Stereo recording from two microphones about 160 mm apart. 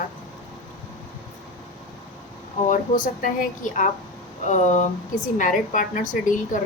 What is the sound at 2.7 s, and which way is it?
A woman's voice, 55° left (ahead or behind).